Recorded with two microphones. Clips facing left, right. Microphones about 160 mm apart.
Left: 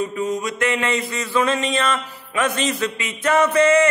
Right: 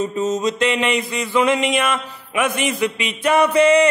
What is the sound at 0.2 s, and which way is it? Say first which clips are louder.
Mantra: right 5 dB; 20° right (ahead or behind).